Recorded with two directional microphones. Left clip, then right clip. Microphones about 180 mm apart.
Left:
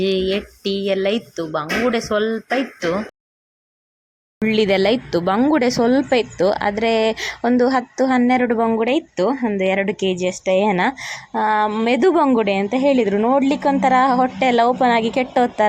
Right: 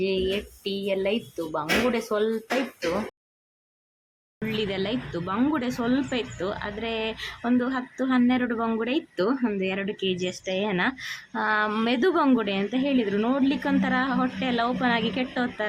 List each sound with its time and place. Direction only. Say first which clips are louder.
0.0 s a woman's voice: left 7 dB; 25° left (ahead or behind)
4.4 s a woman's voice: left 12 dB; 35° left (ahead or behind)